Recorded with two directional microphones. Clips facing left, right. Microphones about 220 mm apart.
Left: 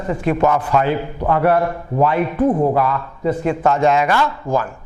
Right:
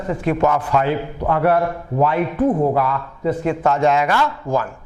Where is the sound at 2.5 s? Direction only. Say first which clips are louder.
Left 1 dB; 30° left (ahead or behind).